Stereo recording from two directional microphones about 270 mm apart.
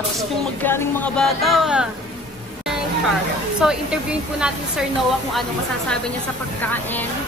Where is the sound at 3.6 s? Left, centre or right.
Centre.